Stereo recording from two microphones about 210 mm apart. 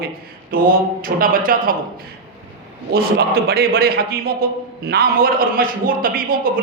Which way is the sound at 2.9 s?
45° right (ahead or behind).